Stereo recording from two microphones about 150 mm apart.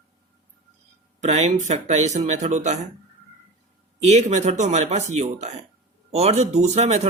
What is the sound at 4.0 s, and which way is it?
Speech, 45° right (ahead or behind).